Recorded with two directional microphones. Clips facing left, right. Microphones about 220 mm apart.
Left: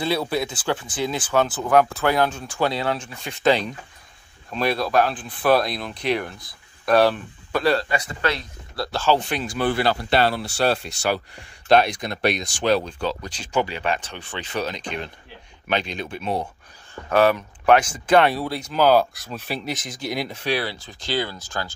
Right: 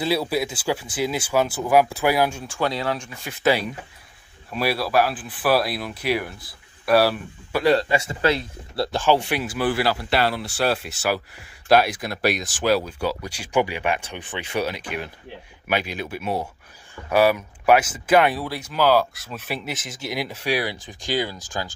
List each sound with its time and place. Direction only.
0.0 s speech: 5° right (ahead or behind)
2.6 s speech: 30° left (ahead or behind)
3.0 s speech: 5° right (ahead or behind)
10.1 s speech: 30° left (ahead or behind)
10.8 s speech: 5° right (ahead or behind)